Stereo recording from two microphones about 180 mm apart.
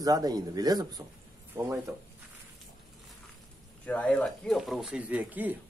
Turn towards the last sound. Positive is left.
turn(degrees=-10)  # may be behind; listen again after turning